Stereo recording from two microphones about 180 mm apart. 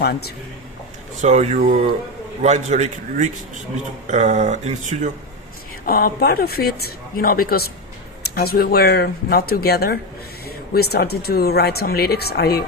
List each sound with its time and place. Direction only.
0.0 s speech: 60° left (ahead or behind)
1.2 s speech: 40° right (ahead or behind)
1.5 s speech: 50° right (ahead or behind)
2.4 s speech: 40° right (ahead or behind)
5.8 s speech: 55° left (ahead or behind)